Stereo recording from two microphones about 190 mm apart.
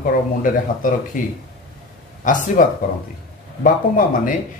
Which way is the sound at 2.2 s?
40° left (ahead or behind).